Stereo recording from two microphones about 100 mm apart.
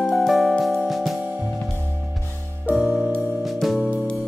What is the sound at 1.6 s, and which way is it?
Music, 30° left (ahead or behind).